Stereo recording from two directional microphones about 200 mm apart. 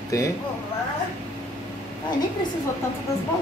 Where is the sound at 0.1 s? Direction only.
15° left (ahead or behind).